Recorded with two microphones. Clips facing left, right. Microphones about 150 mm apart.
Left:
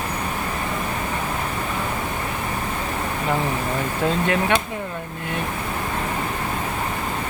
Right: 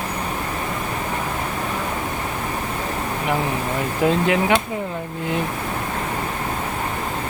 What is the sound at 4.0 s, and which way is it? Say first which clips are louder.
Speech: right 4 dB; 15° right (ahead or behind).